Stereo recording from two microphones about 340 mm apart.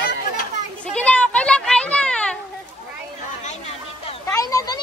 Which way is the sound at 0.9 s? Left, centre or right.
Centre.